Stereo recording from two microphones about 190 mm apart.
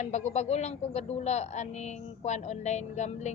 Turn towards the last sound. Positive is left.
turn(degrees=40)  # may be behind; listen again after turning